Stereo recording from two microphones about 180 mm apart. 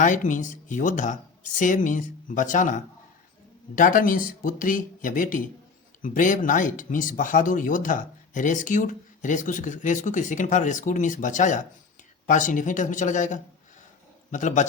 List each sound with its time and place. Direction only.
0.0 s speech: 45° left (ahead or behind)